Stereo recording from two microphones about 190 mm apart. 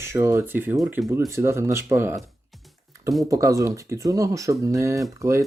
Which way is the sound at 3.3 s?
15° right (ahead or behind).